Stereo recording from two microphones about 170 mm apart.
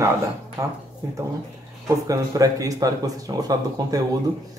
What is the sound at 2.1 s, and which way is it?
Speech, 20° right (ahead or behind).